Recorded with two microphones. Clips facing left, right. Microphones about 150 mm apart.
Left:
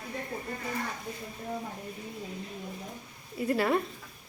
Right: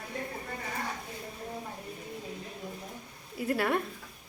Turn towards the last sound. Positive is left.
turn(degrees=0)  # may be behind; listen again after turning